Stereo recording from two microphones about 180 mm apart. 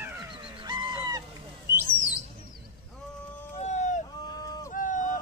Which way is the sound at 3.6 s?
40° left (ahead or behind).